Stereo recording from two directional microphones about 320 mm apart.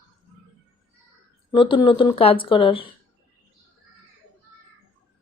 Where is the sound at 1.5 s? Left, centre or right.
Centre.